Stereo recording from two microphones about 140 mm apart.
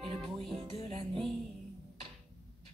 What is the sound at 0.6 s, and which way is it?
Speech, 45° right (ahead or behind).